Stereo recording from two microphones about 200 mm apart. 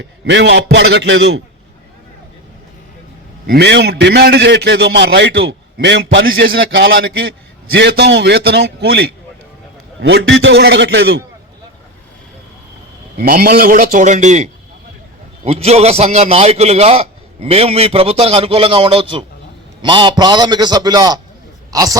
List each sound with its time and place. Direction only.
0.0 s a man's voice: 65° right (ahead or behind)
3.4 s a man's voice: 55° right (ahead or behind)
13.1 s a man's voice: 50° right (ahead or behind); by 21.9 s 15° right (ahead or behind)